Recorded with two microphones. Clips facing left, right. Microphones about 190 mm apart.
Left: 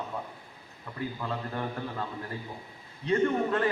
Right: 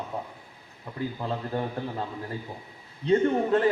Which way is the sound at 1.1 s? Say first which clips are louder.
Right 5 dB; 25° right (ahead or behind).